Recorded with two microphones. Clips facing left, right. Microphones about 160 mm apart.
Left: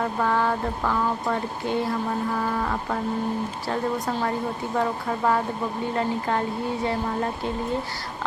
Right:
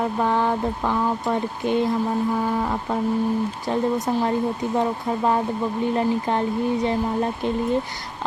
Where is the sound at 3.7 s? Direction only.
20° right (ahead or behind).